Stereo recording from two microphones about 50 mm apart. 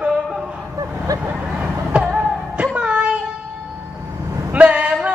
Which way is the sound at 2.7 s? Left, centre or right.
Right.